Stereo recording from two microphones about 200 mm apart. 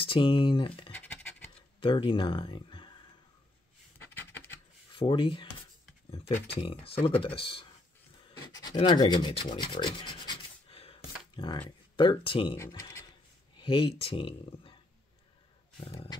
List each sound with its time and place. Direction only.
0.0 s speech: 25° left (ahead or behind)
0.9 s scratch: 10° left (ahead or behind)
1.8 s speech: 25° left (ahead or behind)
4.0 s a sound: 10° left (ahead or behind)
4.9 s speech: 25° left (ahead or behind)
8.7 s rub: 20° left (ahead or behind)
11.3 s speech: 25° left (ahead or behind)
12.5 s speech: 15° left (ahead or behind)
13.6 s speech: 25° left (ahead or behind)